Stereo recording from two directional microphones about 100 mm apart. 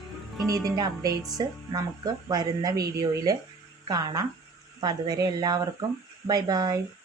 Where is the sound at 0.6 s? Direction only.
40° right (ahead or behind).